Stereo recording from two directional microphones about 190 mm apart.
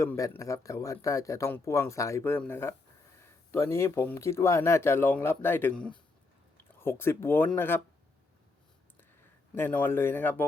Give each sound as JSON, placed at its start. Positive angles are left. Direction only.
{"t": 0.0, "sound": "speech", "side_deg": 15}
{"t": 9.6, "sound": "speech", "side_deg": 10}